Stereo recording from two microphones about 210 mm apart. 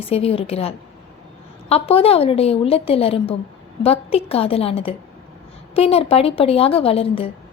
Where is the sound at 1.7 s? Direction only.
25° left (ahead or behind).